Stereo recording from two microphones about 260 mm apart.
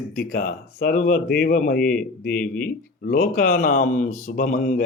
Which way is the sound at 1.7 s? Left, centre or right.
Centre.